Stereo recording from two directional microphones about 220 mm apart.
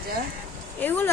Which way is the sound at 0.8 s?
10° left (ahead or behind).